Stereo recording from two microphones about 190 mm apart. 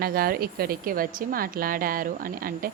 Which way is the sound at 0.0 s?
50° right (ahead or behind).